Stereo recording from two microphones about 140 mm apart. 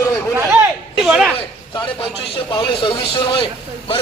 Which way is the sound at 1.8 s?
40° left (ahead or behind).